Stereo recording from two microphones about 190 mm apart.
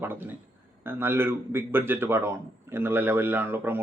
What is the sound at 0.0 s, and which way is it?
Speech, 10° right (ahead or behind).